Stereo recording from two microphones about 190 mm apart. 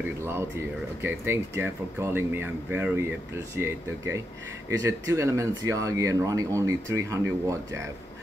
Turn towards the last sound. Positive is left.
turn(degrees=-15)  # may be behind; listen again after turning